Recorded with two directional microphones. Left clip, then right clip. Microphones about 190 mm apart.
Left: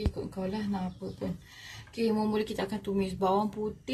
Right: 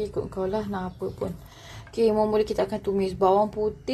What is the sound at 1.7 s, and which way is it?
Speech, 15° right (ahead or behind).